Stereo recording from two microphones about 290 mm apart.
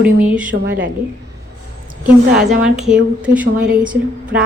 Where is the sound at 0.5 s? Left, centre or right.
Right.